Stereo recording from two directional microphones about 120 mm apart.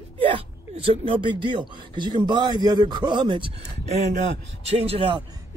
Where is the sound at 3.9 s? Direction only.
80° right; by 5.2 s 50° right (ahead or behind).